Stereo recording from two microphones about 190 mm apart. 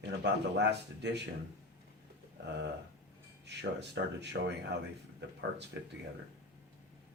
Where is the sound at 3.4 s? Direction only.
65° right (ahead or behind).